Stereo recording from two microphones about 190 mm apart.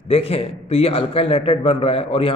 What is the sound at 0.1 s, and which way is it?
A man's voice, 30° left (ahead or behind).